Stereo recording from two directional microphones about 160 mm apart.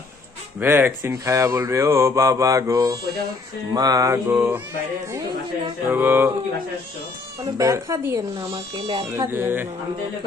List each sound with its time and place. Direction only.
0.6 s speech: 15° right (ahead or behind)
3.8 s mantra: 20° right (ahead or behind)
5.9 s mantra: 15° right (ahead or behind)
7.4 s mantra: 20° right (ahead or behind)
8.4 s speech: 35° right (ahead or behind)
9.1 s mantra: 15° right (ahead or behind)